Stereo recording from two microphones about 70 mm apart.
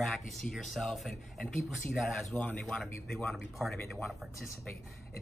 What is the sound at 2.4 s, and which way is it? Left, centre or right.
Speech, centre.